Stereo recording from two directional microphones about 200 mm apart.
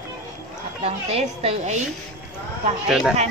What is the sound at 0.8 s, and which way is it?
Speech, 30° right (ahead or behind).